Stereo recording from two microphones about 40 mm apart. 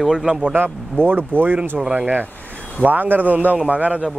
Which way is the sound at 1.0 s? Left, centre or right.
Right.